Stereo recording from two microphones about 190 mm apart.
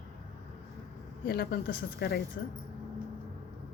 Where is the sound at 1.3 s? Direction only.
55° left (ahead or behind).